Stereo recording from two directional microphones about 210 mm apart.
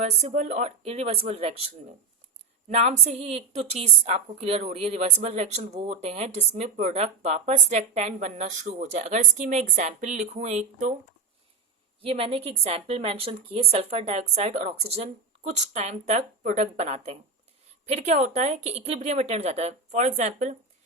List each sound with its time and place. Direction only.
0.0 s a woman's voice: 30° right (ahead or behind)
2.6 s a woman's voice: 30° right (ahead or behind)
12.0 s a woman's voice: 25° right (ahead or behind)